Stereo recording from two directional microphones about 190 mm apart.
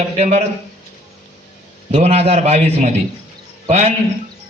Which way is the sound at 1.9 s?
35° right (ahead or behind).